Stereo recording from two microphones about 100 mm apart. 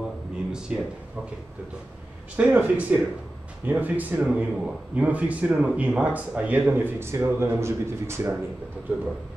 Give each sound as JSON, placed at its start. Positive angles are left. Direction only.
{"t": 0.5, "sound": "speech", "side_deg": -10}
{"t": 2.3, "sound": "a man's voice", "side_deg": -15}